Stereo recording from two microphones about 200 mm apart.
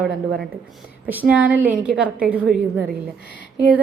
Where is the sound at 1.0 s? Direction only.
10° right (ahead or behind).